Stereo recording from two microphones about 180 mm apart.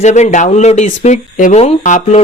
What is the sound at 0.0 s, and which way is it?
Speech, 40° left (ahead or behind).